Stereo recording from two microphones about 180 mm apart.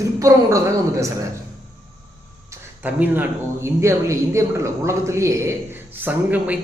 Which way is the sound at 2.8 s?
10° right (ahead or behind).